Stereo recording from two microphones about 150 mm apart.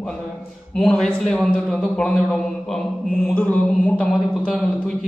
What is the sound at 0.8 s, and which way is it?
A man's voice, 5° left (ahead or behind).